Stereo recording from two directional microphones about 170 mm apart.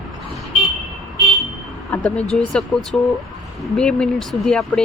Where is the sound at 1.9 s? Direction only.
10° left (ahead or behind).